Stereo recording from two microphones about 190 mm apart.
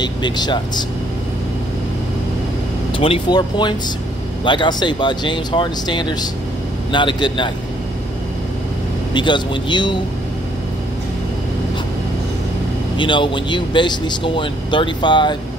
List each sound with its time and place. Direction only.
0.0 s a man's voice: 25° left (ahead or behind)
3.0 s a man's voice: 25° left (ahead or behind)
9.1 s a man's voice: 25° left (ahead or behind)
12.9 s a man's voice: 25° left (ahead or behind)